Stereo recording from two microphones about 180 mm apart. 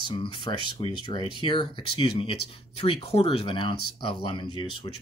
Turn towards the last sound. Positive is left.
turn(degrees=25)  # may be behind; listen again after turning